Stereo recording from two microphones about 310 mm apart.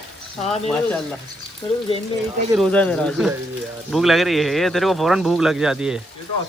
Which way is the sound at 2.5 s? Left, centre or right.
Centre.